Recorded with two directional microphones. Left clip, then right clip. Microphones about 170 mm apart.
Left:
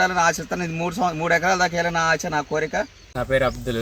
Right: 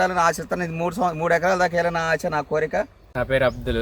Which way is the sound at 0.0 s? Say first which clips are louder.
Left 1 dB; 20° right (ahead or behind).